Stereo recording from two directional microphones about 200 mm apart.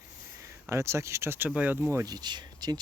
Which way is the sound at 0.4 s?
15° right (ahead or behind).